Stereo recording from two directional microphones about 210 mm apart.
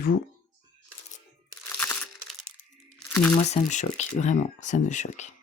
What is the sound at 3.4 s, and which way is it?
Speech, 35° left (ahead or behind).